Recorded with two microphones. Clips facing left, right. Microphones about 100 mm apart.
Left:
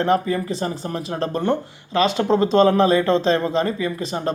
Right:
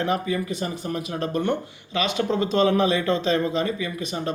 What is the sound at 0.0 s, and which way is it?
A man's voice, 35° left (ahead or behind).